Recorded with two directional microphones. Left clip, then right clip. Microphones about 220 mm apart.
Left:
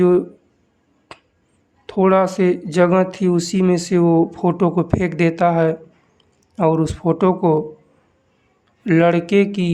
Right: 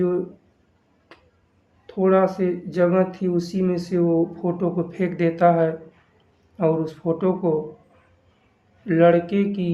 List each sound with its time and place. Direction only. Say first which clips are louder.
1.1 s finger snapping: left 9 dB; 40° left (ahead or behind)
1.9 s speech: left 3 dB; 40° left (ahead or behind)
8.9 s speech: left 2 dB; 40° left (ahead or behind)